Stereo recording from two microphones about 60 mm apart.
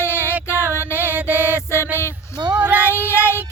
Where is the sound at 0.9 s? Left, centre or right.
Right.